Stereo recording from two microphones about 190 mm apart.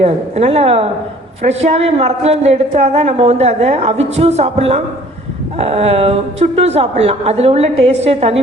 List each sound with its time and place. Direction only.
0.0 s a woman's voice: 35° right (ahead or behind)